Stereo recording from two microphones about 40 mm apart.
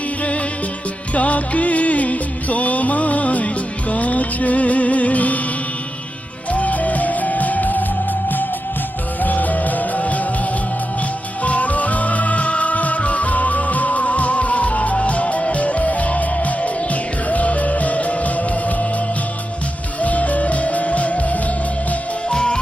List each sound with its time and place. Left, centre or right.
0.2 s music: left
6.5 s music: left
9.2 s music: left
22.3 s music: left